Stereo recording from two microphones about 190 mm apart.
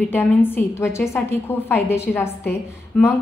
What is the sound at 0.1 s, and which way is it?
A woman's voice, 10° left (ahead or behind).